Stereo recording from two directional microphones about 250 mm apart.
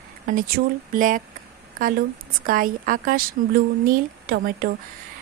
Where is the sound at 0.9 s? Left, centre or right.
Right.